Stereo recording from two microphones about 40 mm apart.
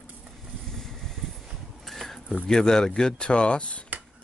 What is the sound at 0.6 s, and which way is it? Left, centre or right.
Vehicle, centre.